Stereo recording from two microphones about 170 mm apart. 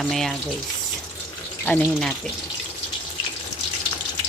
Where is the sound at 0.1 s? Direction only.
Centre (ahead or behind).